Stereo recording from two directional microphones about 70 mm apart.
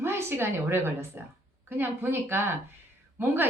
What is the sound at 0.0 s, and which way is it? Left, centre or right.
A woman's voice, right.